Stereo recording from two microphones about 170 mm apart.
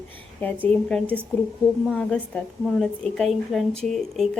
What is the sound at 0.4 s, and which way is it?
A woman's voice, 10° left (ahead or behind).